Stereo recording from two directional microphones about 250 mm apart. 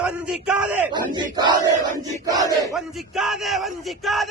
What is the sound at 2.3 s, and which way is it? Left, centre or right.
Battle cry, centre.